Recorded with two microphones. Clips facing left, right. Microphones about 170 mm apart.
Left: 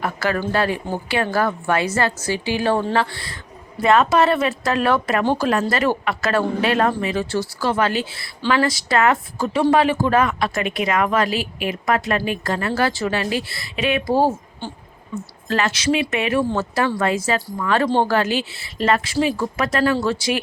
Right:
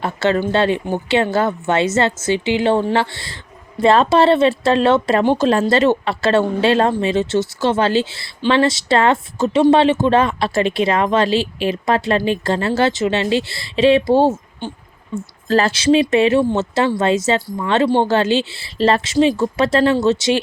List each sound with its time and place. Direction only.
0.0 s speech: 25° right (ahead or behind)
16.4 s speech: 20° right (ahead or behind)